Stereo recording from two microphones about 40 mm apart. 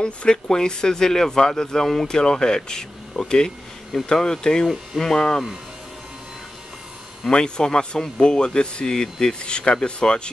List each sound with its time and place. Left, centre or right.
0.0 s speech: left
7.2 s speech: centre